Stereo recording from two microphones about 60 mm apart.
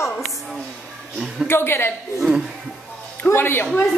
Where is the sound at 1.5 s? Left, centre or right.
Left.